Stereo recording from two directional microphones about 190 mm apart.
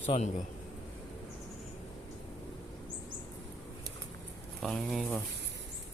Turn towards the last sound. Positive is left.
turn(degrees=0)  # may be behind; listen again after turning